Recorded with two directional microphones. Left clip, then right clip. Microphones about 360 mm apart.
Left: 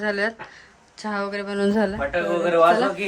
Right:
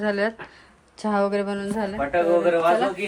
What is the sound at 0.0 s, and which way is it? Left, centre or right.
A woman's voice, centre.